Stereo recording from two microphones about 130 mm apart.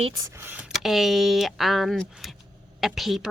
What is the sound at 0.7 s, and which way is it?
A woman's voice, centre (ahead or behind).